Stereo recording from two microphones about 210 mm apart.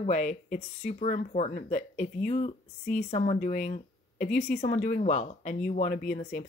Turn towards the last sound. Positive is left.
turn(degrees=40)  # may be behind; listen again after turning